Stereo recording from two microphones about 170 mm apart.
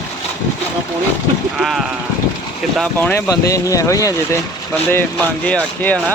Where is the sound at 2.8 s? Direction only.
10° left (ahead or behind).